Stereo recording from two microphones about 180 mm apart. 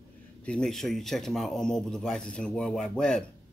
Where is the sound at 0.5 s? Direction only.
5° left (ahead or behind).